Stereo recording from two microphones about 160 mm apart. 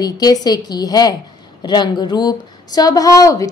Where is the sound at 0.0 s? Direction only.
25° left (ahead or behind).